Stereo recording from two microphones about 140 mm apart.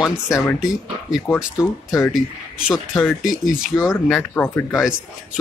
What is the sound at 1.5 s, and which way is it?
Speech, 20° left (ahead or behind).